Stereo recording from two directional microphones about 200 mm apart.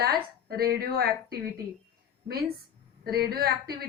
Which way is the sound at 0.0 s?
50° right (ahead or behind).